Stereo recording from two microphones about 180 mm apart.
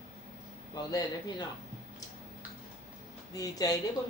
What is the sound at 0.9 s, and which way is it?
Speech, 20° left (ahead or behind).